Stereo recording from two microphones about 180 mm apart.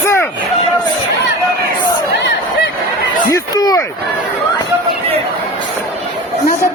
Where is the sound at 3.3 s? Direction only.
20° left (ahead or behind).